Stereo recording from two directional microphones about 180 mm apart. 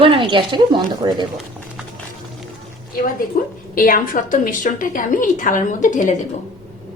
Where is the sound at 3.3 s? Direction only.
50° left (ahead or behind).